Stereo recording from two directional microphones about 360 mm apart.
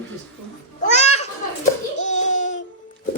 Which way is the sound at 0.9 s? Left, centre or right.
Centre.